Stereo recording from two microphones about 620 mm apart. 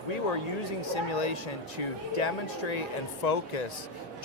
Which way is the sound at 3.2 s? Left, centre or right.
Left.